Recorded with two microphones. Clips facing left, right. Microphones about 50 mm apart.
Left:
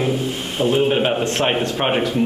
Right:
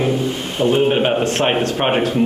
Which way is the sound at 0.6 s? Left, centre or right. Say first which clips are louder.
Right 2 dB; centre.